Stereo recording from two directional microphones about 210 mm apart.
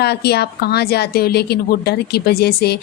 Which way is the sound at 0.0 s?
50° left (ahead or behind).